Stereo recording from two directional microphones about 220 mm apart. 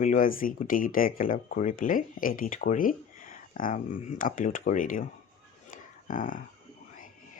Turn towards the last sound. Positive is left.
turn(degrees=40)  # may be behind; listen again after turning